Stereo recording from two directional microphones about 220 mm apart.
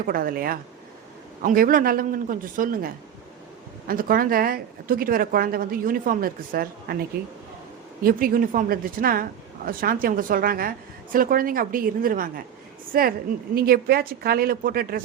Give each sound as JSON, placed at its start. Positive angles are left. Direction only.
{"t": 0.0, "sound": "speech", "side_deg": -40}
{"t": 8.0, "sound": "a woman's voice", "side_deg": -40}